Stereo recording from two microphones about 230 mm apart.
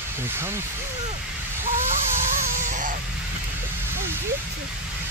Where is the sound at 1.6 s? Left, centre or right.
Right.